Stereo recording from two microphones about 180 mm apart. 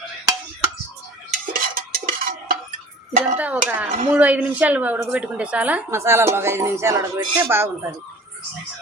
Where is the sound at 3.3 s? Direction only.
10° right (ahead or behind).